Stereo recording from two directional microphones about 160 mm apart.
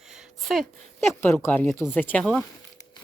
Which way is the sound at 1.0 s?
15° left (ahead or behind).